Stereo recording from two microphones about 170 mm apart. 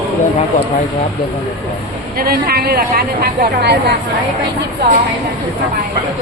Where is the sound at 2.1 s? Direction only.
60° right (ahead or behind); by 3.9 s 80° right.